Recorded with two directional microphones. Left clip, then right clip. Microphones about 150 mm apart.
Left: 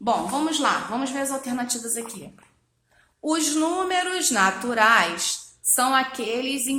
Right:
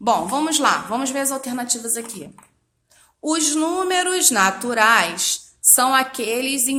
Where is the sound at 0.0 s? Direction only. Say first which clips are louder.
Right 4 dB; 45° right (ahead or behind); by 2.1 s 25° right (ahead or behind).